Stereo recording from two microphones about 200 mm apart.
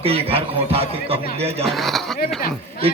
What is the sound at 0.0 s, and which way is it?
A man's voice, 30° right (ahead or behind).